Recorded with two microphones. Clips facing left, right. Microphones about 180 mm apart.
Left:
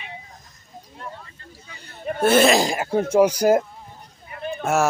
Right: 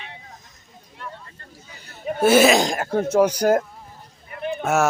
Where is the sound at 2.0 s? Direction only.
5° right (ahead or behind).